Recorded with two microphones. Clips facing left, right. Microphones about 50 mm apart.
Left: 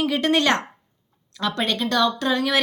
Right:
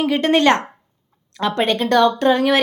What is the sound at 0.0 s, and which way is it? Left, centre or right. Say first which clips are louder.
A woman's voice: right 5 dB; right.